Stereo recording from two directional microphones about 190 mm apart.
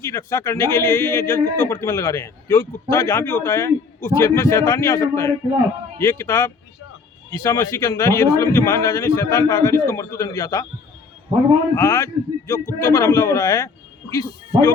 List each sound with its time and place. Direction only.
0.0 s a man's voice: 15° left (ahead or behind)
11.7 s a man's voice: 15° left (ahead or behind)